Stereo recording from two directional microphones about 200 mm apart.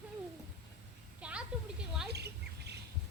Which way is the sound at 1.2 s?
5° right (ahead or behind).